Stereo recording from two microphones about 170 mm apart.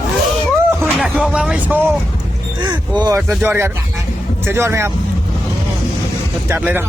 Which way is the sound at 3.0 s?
20° right (ahead or behind).